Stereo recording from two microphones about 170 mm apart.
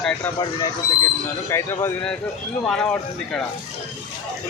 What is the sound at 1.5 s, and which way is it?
Speech, 15° left (ahead or behind).